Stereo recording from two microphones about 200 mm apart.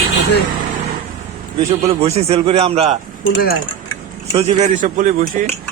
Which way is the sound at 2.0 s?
30° right (ahead or behind).